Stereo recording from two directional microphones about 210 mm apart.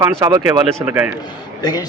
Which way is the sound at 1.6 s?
20° left (ahead or behind).